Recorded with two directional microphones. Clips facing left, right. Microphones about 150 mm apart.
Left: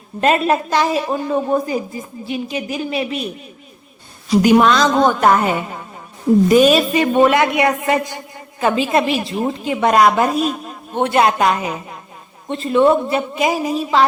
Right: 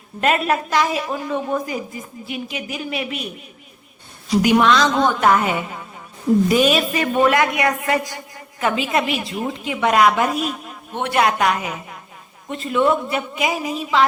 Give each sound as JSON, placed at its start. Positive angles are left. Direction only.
{"t": 0.2, "sound": "a woman's voice", "side_deg": 30}
{"t": 4.4, "sound": "a woman's voice", "side_deg": 40}
{"t": 6.9, "sound": "a woman's voice", "side_deg": 25}